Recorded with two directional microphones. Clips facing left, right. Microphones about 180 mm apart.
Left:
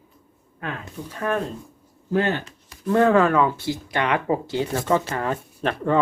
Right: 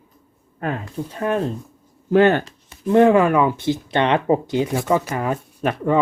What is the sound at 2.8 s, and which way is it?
Speech, 20° right (ahead or behind).